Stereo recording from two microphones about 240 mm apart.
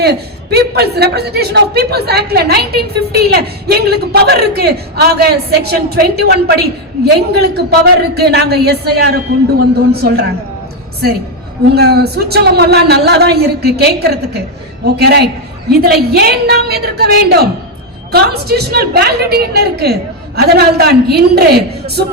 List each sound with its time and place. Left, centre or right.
0.0 s a man's voice: right
11.7 s a man's voice: right